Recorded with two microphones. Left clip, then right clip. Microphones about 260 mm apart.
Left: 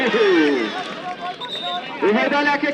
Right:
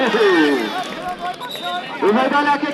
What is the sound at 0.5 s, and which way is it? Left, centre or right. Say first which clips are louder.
Run: right 2 dB; right.